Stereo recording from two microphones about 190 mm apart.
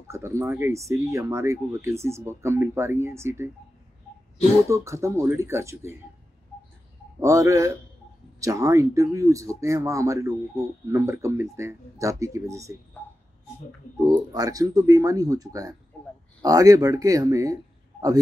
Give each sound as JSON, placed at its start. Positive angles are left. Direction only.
{"t": 0.1, "sound": "speech", "side_deg": -15}
{"t": 4.6, "sound": "speech", "side_deg": -15}
{"t": 7.2, "sound": "speech", "side_deg": -15}
{"t": 14.0, "sound": "speech", "side_deg": -20}